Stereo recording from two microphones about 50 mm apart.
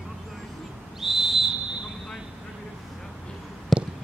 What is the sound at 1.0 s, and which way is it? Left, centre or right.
Whistle, centre.